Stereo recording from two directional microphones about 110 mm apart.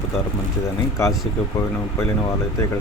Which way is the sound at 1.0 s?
25° left (ahead or behind).